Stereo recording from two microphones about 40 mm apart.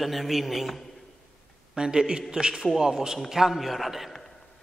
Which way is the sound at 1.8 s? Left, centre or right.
Centre.